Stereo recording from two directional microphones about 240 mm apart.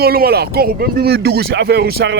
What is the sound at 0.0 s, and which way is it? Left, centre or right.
Speech, right.